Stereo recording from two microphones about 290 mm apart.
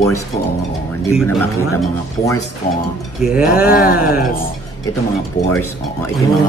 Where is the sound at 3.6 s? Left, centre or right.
Left.